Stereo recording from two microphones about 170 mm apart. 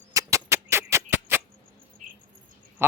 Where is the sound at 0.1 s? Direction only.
20° right (ahead or behind).